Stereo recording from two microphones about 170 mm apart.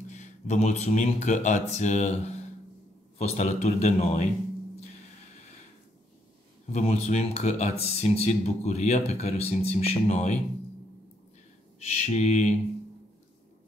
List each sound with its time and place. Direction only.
0.1 s speech: 45° left (ahead or behind)
6.7 s speech: 40° left (ahead or behind)
11.8 s speech: 40° left (ahead or behind)